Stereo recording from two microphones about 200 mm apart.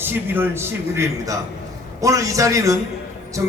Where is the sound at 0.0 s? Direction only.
10° right (ahead or behind).